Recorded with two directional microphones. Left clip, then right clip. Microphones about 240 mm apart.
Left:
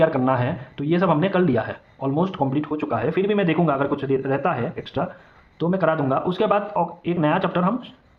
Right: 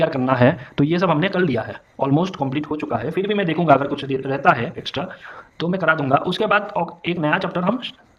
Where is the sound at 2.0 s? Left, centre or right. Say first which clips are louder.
Right 3 dB; right.